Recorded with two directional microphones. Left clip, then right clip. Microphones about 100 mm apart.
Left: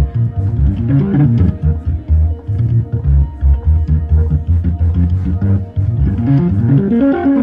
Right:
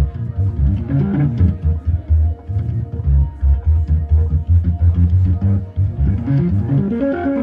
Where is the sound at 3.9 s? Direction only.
15° right (ahead or behind).